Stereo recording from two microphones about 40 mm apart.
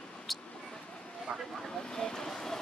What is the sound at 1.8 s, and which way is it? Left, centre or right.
Vehicle, centre.